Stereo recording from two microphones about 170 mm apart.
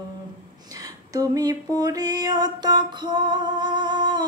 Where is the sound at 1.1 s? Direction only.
20° right (ahead or behind).